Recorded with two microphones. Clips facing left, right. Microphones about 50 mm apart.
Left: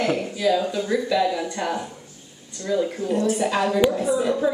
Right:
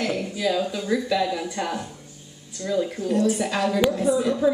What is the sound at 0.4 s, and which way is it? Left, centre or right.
A woman's voice, centre.